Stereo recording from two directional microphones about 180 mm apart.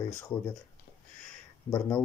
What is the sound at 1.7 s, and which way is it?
Speech, 15° left (ahead or behind).